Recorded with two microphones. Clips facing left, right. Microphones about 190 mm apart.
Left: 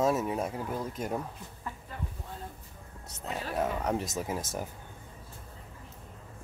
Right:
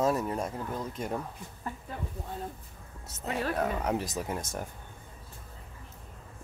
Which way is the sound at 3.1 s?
Centre (ahead or behind).